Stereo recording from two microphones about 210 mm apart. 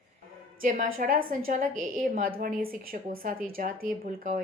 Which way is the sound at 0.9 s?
40° right (ahead or behind).